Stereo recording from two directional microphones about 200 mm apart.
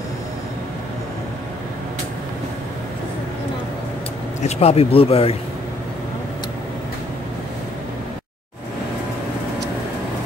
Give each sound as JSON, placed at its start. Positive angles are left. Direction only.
{"t": 4.4, "sound": "speech", "side_deg": 30}